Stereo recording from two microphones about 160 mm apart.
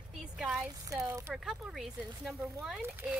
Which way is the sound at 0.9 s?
20° right (ahead or behind).